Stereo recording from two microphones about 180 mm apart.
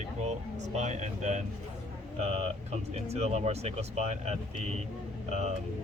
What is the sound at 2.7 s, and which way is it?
Speech, 35° right (ahead or behind).